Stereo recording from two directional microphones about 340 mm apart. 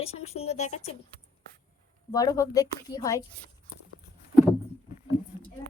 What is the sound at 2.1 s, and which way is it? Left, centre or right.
A woman's voice, centre.